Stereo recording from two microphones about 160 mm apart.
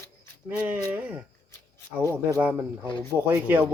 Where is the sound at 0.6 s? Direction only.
15° right (ahead or behind).